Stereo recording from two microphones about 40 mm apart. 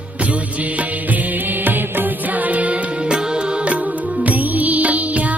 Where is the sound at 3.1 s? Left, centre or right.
Right.